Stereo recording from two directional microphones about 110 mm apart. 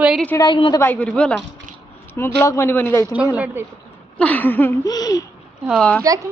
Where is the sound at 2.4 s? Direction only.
25° left (ahead or behind).